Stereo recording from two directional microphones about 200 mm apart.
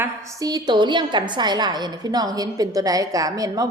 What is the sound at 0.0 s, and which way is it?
A woman's voice, 15° right (ahead or behind).